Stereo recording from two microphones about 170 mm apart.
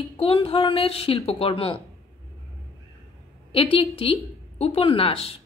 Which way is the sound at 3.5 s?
30° left (ahead or behind).